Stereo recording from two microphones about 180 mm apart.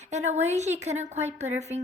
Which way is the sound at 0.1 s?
40° right (ahead or behind).